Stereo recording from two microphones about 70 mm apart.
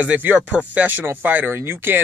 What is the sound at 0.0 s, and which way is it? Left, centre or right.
Speech, right.